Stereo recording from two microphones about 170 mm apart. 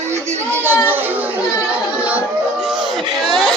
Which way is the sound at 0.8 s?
10° right (ahead or behind).